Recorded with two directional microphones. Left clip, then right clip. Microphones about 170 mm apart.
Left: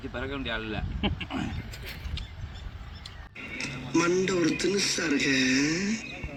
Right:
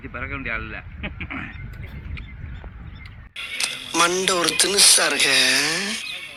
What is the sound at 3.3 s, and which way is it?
Speech, 80° right.